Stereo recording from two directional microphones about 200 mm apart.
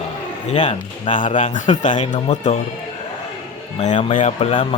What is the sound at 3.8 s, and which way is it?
Speech, 35° left (ahead or behind).